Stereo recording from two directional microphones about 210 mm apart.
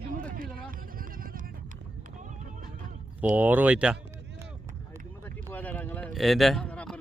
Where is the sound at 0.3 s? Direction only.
40° right (ahead or behind).